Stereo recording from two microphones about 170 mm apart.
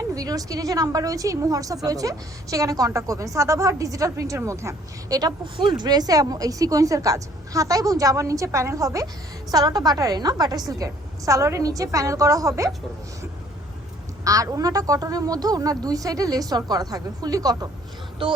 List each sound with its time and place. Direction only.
0.1 s a woman's voice: 20° right (ahead or behind)
14.3 s a woman's voice: 20° right (ahead or behind)